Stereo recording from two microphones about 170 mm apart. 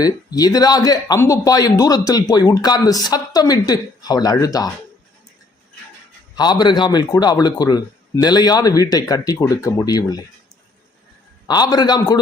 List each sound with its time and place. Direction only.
0.0 s speech: 20° left (ahead or behind)
6.3 s speech: 25° left (ahead or behind)
11.4 s speech: 25° left (ahead or behind)